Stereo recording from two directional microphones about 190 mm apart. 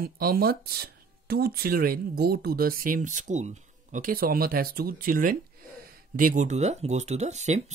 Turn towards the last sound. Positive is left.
turn(degrees=-35)  # may be behind; listen again after turning